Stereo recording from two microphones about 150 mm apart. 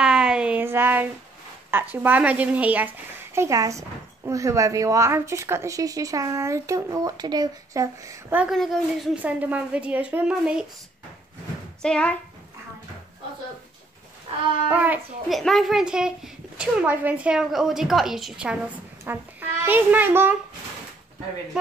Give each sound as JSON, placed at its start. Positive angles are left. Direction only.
{"t": 0.0, "sound": "a sound", "side_deg": -5}
{"t": 1.7, "sound": "a woman's voice", "side_deg": -15}
{"t": 3.3, "sound": "speech", "side_deg": -20}
{"t": 8.4, "sound": "a woman's voice", "side_deg": 0}
{"t": 11.8, "sound": "speech", "side_deg": 5}
{"t": 14.3, "sound": "a sound", "side_deg": -40}
{"t": 14.7, "sound": "a woman's voice", "side_deg": -10}
{"t": 15.3, "sound": "a woman's voice", "side_deg": 0}